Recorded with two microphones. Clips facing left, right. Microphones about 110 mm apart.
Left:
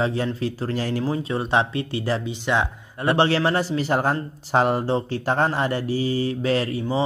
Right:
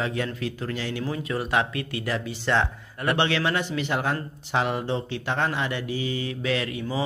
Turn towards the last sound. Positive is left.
turn(degrees=30)  # may be behind; listen again after turning